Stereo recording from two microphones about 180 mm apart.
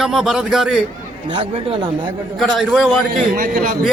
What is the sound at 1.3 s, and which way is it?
Speech, 30° right (ahead or behind).